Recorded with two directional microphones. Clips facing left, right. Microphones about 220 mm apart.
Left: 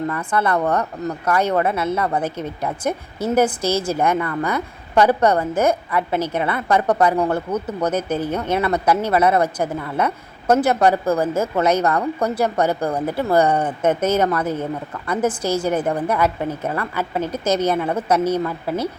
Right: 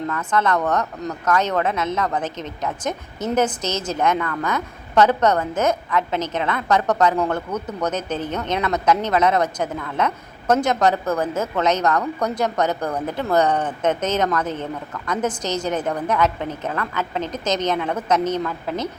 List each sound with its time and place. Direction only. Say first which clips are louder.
0.1 s speech: even; 10° left (ahead or behind)